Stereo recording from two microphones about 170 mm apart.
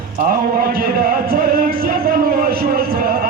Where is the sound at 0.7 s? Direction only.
60° right (ahead or behind).